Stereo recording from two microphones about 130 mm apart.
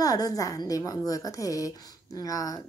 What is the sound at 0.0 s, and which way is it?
Speech, 25° left (ahead or behind).